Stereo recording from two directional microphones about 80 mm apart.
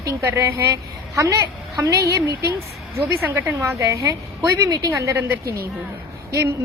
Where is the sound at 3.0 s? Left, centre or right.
Right.